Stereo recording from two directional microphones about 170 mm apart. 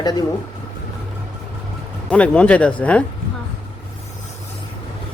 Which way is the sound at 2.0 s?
10° left (ahead or behind).